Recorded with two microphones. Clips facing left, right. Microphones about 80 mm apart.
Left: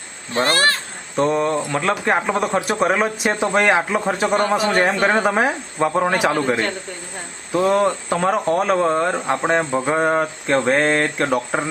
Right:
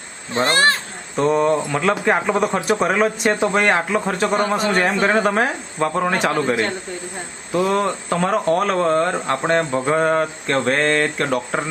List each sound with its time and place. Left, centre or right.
0.3 s speech: right
1.1 s speech: centre
7.5 s speech: centre